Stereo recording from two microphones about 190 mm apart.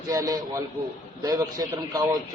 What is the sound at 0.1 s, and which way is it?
A man's voice, 20° right (ahead or behind).